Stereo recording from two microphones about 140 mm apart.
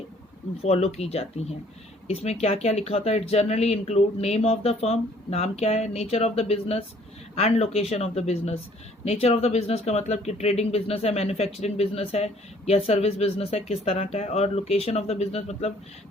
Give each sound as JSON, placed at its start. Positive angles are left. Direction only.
{"t": 0.6, "sound": "speech", "side_deg": 50}